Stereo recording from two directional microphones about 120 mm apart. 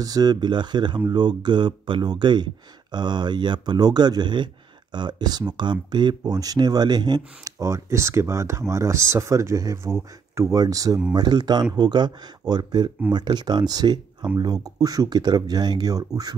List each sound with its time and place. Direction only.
0.0 s speech: 35° right (ahead or behind)
7.5 s speech: 25° right (ahead or behind)